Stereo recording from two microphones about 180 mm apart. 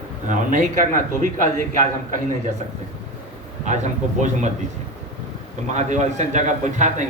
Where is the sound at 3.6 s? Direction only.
40° right (ahead or behind).